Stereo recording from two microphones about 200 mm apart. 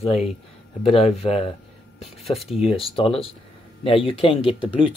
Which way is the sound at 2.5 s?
30° left (ahead or behind).